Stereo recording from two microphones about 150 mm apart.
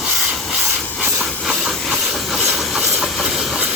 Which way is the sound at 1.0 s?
5° right (ahead or behind).